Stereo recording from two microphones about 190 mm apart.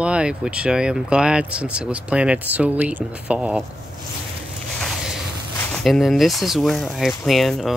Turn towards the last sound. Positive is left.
turn(degrees=0)  # may be behind; listen again after turning